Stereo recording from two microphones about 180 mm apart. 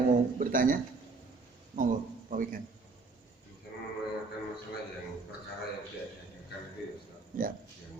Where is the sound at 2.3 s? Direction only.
50° right (ahead or behind).